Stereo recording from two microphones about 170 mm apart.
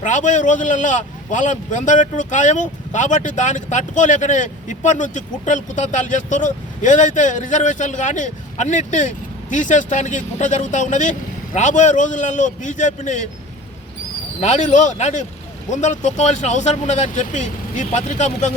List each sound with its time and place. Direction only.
0.0 s a man's voice: 45° left (ahead or behind)
14.4 s a man's voice: 45° left (ahead or behind)